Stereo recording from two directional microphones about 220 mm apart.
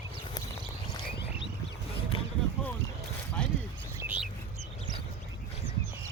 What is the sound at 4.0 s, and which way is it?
Bird, 5° right (ahead or behind).